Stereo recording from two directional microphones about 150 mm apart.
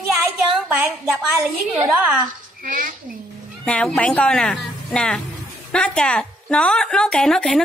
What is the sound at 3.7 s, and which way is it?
A woman's voice, 10° left (ahead or behind).